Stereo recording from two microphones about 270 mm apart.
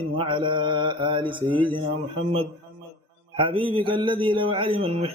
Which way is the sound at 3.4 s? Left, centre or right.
Centre.